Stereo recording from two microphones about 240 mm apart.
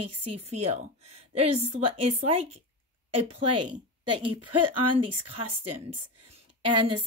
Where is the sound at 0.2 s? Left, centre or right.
Right.